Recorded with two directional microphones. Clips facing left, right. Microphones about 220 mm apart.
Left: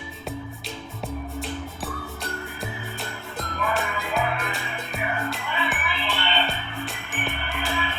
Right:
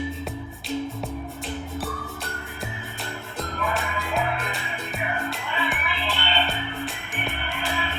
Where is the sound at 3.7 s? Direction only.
Centre (ahead or behind).